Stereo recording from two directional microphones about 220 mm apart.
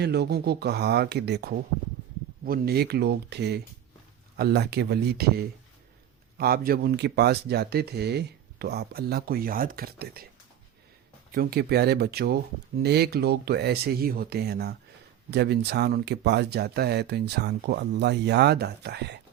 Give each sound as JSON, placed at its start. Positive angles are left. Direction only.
{"t": 0.0, "sound": "speech", "side_deg": -50}
{"t": 11.3, "sound": "speech", "side_deg": -45}